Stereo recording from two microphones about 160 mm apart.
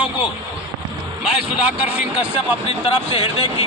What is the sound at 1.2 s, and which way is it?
Speech, 5° right (ahead or behind).